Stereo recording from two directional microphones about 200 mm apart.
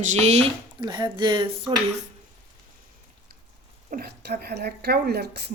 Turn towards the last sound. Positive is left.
turn(degrees=-55)  # may be behind; listen again after turning